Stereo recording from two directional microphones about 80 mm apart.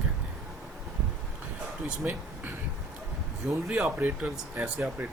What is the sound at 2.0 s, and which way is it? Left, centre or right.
Speech, centre.